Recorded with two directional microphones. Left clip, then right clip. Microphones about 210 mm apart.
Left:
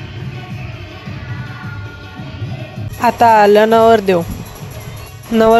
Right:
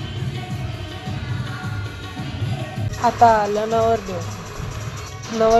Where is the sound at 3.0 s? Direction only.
55° left (ahead or behind).